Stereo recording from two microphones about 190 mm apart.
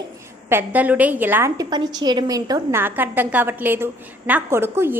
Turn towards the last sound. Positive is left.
turn(degrees=-10)  # may be behind; listen again after turning